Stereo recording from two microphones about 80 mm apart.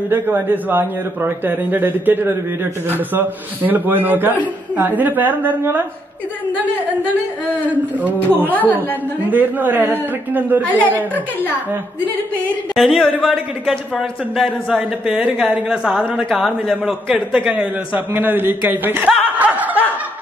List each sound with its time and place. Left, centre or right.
0.1 s a man's voice: right
8.5 s a woman's voice: left
9.3 s a man's voice: right
12.7 s speech: centre
17.9 s a man's voice: right
19.3 s snicker: centre